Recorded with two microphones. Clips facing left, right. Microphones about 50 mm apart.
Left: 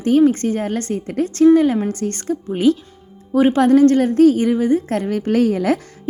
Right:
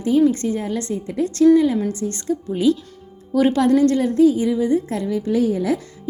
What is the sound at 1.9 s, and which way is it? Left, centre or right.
Speech, left.